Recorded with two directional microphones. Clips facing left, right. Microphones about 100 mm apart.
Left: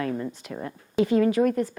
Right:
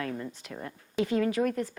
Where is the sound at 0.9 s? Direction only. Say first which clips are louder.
Left 6 dB; 20° left (ahead or behind).